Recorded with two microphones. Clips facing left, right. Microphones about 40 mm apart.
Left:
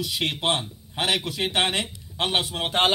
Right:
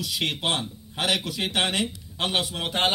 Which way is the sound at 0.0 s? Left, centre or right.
Left.